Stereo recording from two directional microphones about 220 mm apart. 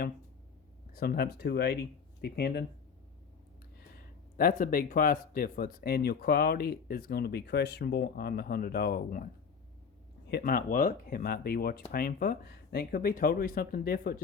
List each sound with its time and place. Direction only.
0.9 s speech: 45° left (ahead or behind)
4.4 s speech: 40° left (ahead or behind)
10.2 s speech: 45° left (ahead or behind)